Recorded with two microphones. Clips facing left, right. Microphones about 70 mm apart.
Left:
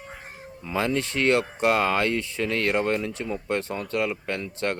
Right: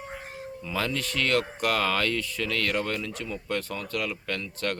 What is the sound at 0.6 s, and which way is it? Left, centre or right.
Speech, left.